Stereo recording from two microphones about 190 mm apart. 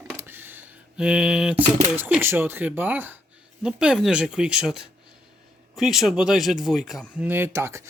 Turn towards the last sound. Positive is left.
turn(degrees=-15)  # may be behind; listen again after turning